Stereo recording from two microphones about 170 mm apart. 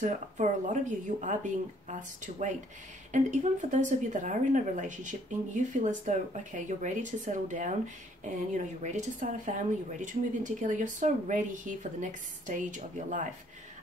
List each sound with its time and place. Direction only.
0.0 s speech: 45° right (ahead or behind)